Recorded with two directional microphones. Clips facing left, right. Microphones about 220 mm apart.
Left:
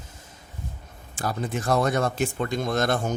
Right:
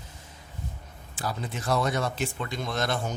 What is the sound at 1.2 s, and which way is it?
Speech, 50° left (ahead or behind).